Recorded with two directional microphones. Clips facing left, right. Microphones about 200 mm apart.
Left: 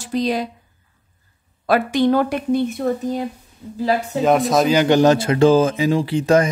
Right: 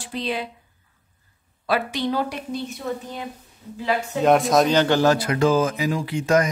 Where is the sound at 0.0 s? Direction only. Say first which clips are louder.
Left 7 dB; 40° left (ahead or behind).